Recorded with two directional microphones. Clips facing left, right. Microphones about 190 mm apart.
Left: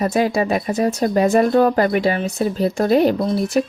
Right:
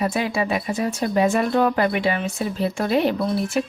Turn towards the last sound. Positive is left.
turn(degrees=40)  # may be behind; listen again after turning